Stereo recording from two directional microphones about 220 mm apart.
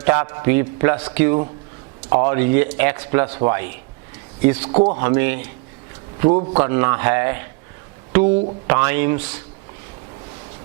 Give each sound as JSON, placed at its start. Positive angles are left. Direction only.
{"t": 0.0, "sound": "speech", "side_deg": -15}
{"t": 4.7, "sound": "speech", "side_deg": -35}
{"t": 4.9, "sound": "speech", "side_deg": -15}
{"t": 6.3, "sound": "speech", "side_deg": -30}
{"t": 6.6, "sound": "speech", "side_deg": -15}
{"t": 8.1, "sound": "a sound", "side_deg": -10}
{"t": 8.6, "sound": "speech", "side_deg": -15}